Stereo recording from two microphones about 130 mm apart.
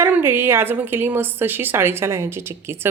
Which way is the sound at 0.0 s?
20° right (ahead or behind).